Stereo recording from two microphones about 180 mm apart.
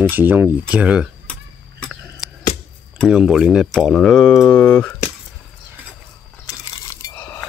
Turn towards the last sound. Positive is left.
turn(degrees=20)  # may be behind; listen again after turning